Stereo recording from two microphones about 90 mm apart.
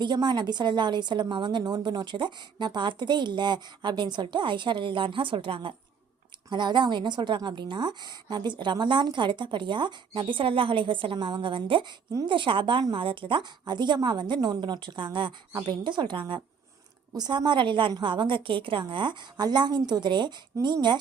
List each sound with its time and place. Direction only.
0.0 s a woman's voice: 55° right (ahead or behind); by 5.7 s 70° right (ahead or behind)
6.5 s a woman's voice: 60° right (ahead or behind)